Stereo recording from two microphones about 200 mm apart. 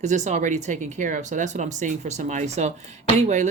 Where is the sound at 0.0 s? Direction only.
35° right (ahead or behind).